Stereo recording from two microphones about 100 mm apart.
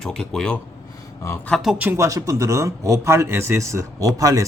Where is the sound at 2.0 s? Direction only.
30° right (ahead or behind).